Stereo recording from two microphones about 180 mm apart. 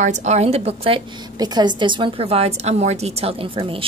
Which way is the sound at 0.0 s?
40° right (ahead or behind).